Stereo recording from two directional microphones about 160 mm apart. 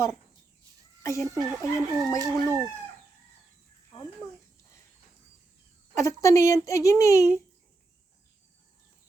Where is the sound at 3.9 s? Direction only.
20° left (ahead or behind).